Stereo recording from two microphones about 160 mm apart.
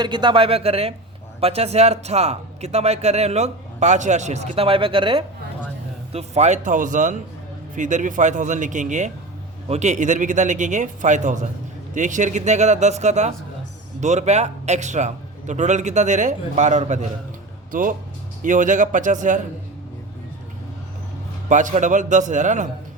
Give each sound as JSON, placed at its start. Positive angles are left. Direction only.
{"t": 0.0, "sound": "speech", "side_deg": -30}
{"t": 6.1, "sound": "speech", "side_deg": -45}
{"t": 17.7, "sound": "speech", "side_deg": -60}
{"t": 21.5, "sound": "speech", "side_deg": -50}